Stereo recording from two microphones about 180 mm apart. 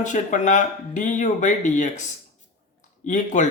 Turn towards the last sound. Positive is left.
turn(degrees=45)  # may be behind; listen again after turning